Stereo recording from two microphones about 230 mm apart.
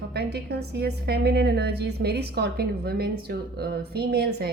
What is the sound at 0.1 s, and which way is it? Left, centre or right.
A woman's voice, right.